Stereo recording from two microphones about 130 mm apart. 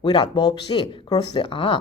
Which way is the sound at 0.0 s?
35° left (ahead or behind).